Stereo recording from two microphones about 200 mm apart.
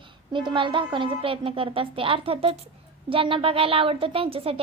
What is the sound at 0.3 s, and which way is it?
A woman's voice, 25° right (ahead or behind).